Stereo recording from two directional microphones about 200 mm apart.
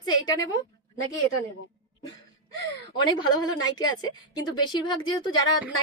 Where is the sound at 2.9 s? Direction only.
20° left (ahead or behind).